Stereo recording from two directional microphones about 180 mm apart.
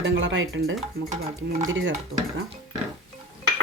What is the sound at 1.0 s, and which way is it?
Stir, 60° right (ahead or behind).